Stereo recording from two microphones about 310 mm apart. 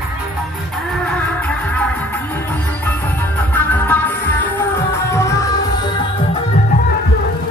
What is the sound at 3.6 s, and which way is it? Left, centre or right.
Music, centre.